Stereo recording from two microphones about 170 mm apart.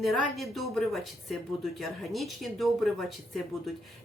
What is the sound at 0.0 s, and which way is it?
Speech, centre (ahead or behind).